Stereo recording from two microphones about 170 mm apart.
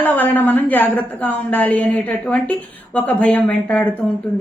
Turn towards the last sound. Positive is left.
turn(degrees=10)  # may be behind; listen again after turning